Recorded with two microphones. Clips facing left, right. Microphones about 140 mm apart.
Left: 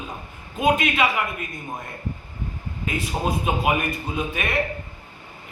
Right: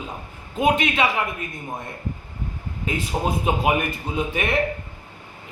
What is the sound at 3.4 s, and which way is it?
A man's voice, 25° right (ahead or behind).